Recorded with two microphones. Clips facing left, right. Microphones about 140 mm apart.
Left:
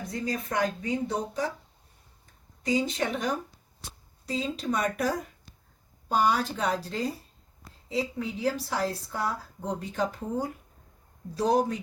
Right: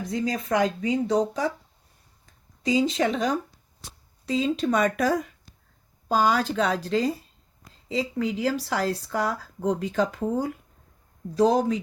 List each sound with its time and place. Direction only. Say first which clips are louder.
0.1 s speech: right 6 dB; 90° right
2.6 s speech: right 5 dB; 90° right